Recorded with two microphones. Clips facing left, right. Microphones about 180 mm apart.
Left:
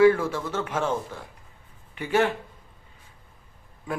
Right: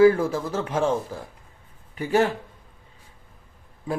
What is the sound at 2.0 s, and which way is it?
Speech, 35° right (ahead or behind).